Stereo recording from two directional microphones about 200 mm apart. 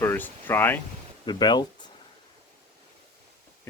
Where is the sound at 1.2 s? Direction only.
20° left (ahead or behind).